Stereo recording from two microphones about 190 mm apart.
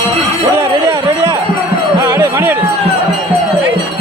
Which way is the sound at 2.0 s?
15° right (ahead or behind).